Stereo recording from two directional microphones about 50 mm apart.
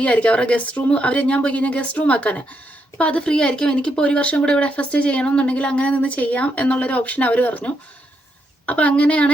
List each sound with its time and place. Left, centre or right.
0.0 s speech: left